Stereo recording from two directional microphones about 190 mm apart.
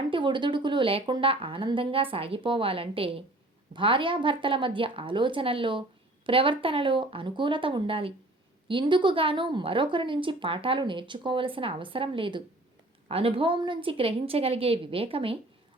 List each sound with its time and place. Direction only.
0.1 s a woman's voice: 25° right (ahead or behind)